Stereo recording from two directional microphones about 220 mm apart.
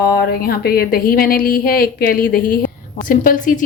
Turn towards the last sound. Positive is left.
turn(degrees=40)  # may be behind; listen again after turning